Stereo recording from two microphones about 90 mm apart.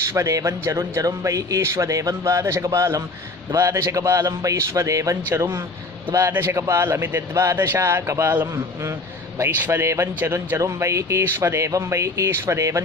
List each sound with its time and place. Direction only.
0.0 s speech: 30° right (ahead or behind)